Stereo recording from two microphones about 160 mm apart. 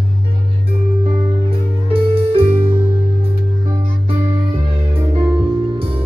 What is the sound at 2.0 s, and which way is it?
Music, 35° right (ahead or behind).